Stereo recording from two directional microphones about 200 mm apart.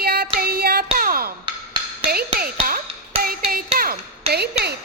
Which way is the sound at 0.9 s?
45° right (ahead or behind).